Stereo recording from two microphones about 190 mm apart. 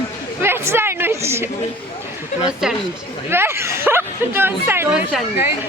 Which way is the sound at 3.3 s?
15° right (ahead or behind).